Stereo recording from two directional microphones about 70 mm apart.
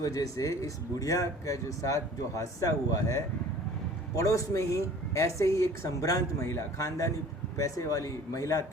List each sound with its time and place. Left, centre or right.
0.0 s speech: left